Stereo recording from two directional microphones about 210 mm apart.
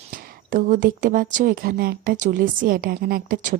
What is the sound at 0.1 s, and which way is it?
Speech, 40° right (ahead or behind).